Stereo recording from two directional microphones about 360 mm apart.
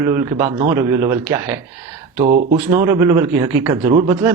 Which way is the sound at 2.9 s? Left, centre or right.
Centre.